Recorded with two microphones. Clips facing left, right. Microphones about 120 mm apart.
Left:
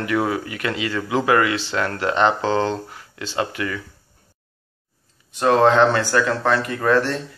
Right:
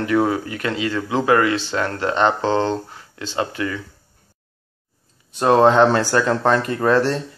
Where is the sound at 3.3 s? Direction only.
25° right (ahead or behind).